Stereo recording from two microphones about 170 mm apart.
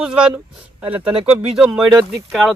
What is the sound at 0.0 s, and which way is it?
Speech, 5° right (ahead or behind).